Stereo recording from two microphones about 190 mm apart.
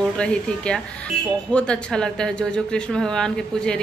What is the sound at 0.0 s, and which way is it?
Speech, 5° left (ahead or behind).